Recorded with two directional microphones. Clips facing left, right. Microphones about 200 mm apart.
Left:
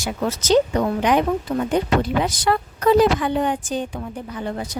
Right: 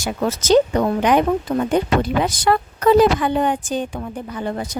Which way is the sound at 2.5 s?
55° right (ahead or behind).